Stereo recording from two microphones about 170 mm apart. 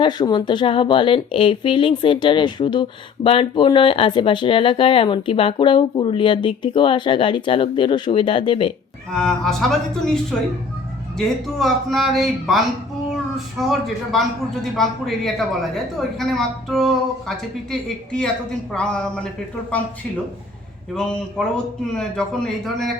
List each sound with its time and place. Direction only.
0.0 s speech: 25° left (ahead or behind)
9.1 s a woman's voice: 5° left (ahead or behind)
11.2 s a woman's voice: centre (ahead or behind)
20.9 s a woman's voice: 5° left (ahead or behind)